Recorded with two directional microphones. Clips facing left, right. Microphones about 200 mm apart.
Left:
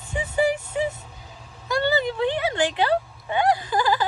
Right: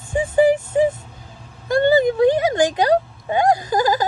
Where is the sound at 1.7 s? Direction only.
50° right (ahead or behind).